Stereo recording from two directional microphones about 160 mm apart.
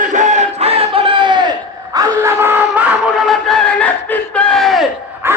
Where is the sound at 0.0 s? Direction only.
50° right (ahead or behind); by 2.0 s 25° right (ahead or behind).